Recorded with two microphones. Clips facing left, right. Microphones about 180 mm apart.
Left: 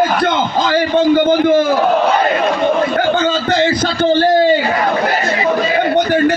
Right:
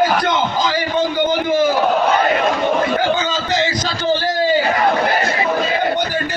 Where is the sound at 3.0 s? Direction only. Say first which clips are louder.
Left 4 dB; 55° left (ahead or behind).